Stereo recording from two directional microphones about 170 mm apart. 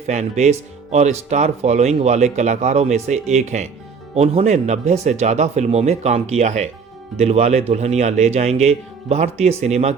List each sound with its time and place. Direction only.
0.1 s speech: 40° right (ahead or behind)